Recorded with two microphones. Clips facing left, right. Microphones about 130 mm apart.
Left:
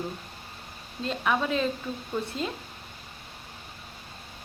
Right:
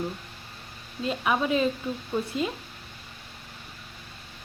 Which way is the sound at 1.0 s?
10° right (ahead or behind).